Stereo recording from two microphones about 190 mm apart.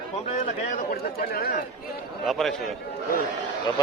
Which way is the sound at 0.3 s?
45° left (ahead or behind).